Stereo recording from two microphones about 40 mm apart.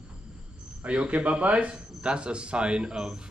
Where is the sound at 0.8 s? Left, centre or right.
Right.